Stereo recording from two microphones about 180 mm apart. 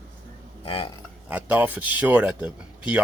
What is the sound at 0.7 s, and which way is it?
Speech, 30° left (ahead or behind).